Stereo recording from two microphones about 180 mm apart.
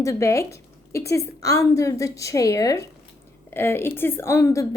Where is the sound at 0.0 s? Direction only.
15° left (ahead or behind).